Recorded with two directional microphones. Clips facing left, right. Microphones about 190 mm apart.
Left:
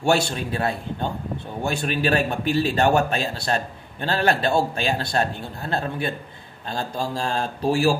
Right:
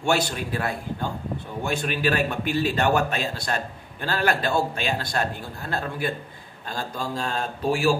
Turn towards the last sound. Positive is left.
turn(degrees=35)  # may be behind; listen again after turning